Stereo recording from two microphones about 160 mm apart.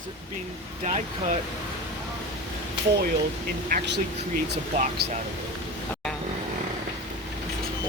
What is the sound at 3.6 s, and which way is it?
Speech, 75° right (ahead or behind).